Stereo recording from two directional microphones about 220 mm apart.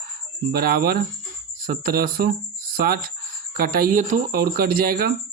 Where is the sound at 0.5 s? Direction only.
45° right (ahead or behind).